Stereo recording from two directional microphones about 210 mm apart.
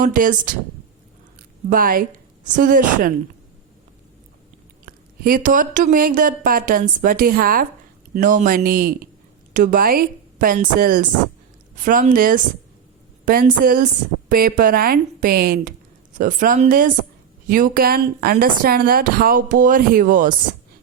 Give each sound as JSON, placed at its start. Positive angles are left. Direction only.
{"t": 0.0, "sound": "speech", "side_deg": -40}
{"t": 1.7, "sound": "a woman's voice", "side_deg": -45}
{"t": 4.9, "sound": "speech", "side_deg": -45}